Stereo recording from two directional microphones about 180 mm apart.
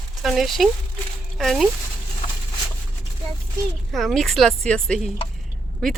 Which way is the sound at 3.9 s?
Centre (ahead or behind).